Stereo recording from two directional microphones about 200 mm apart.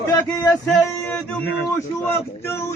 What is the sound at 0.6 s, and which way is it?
Speech, 5° left (ahead or behind).